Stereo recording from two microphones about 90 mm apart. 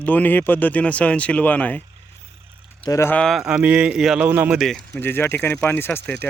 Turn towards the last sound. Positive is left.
turn(degrees=25)  # may be behind; listen again after turning